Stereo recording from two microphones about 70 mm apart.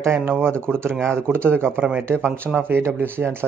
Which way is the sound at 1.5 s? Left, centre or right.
Right.